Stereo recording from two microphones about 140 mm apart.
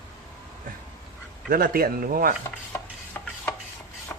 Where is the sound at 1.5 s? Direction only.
90° right.